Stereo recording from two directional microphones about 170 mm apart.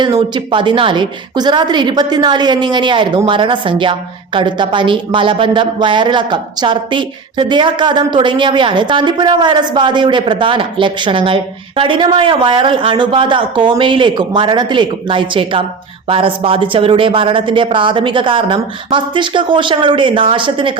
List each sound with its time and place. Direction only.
0.0 s a woman's voice: 25° right (ahead or behind)